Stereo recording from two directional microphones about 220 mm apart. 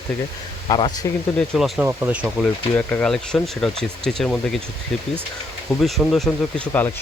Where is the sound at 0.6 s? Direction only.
20° left (ahead or behind).